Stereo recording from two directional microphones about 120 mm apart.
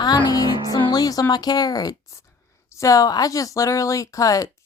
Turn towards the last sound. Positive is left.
turn(degrees=30)  # may be behind; listen again after turning